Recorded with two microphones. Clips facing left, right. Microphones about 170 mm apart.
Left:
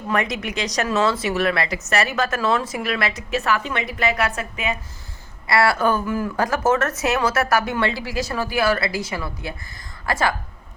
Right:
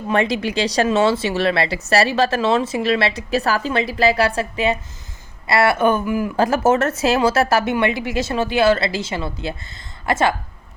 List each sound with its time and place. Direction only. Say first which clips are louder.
0.1 s speech: right 5 dB; 30° right (ahead or behind); by 6.3 s 15° right (ahead or behind)
6.3 s speech: right 4 dB; 25° right (ahead or behind)